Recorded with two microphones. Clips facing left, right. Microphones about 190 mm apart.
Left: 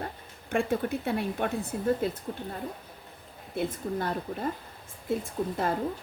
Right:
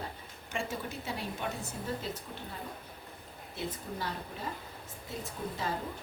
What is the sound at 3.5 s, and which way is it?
Speech, 55° left (ahead or behind).